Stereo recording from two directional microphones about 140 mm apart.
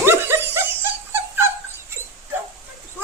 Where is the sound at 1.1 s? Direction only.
15° right (ahead or behind).